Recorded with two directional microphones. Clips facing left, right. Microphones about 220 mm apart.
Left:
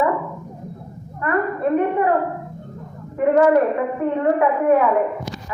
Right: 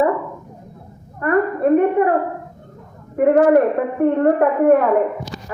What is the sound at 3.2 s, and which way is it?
A woman's voice, 55° right (ahead or behind).